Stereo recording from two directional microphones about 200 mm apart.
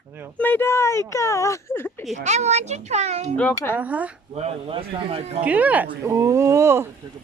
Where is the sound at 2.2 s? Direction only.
35° right (ahead or behind).